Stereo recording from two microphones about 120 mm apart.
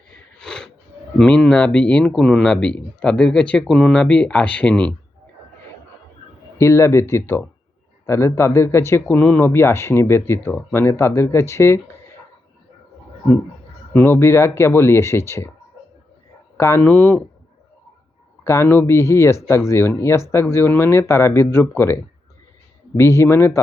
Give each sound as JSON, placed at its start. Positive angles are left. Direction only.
{"t": 0.3, "sound": "a sound", "side_deg": 5}
{"t": 1.2, "sound": "speech", "side_deg": 5}
{"t": 6.6, "sound": "speech", "side_deg": 25}
{"t": 13.9, "sound": "speech", "side_deg": 20}
{"t": 16.6, "sound": "speech", "side_deg": 25}
{"t": 18.4, "sound": "speech", "side_deg": 20}
{"t": 23.0, "sound": "speech", "side_deg": 20}